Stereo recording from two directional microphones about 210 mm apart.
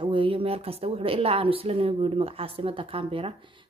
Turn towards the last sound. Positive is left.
turn(degrees=-25)  # may be behind; listen again after turning